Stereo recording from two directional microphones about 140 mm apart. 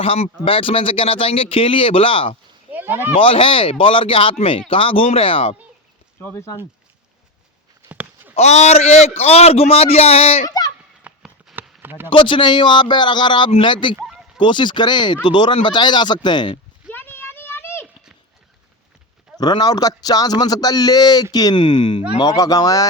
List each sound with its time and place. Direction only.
0.0 s speech: 45° left (ahead or behind)
2.7 s a sound: 15° right (ahead or behind)
3.2 s speech: 40° left (ahead or behind)
6.1 s speech: 15° left (ahead or behind)
7.9 s walk: 10° right (ahead or behind)
8.4 s a man's voice: 50° left (ahead or behind)
10.4 s speech: 25° left (ahead or behind)
11.0 s a sound: centre (ahead or behind)
11.8 s a sound: 15° right (ahead or behind)
12.0 s speech: 35° left (ahead or behind)
16.9 s a sound: 15° left (ahead or behind)
19.4 s a man's voice: 30° left (ahead or behind)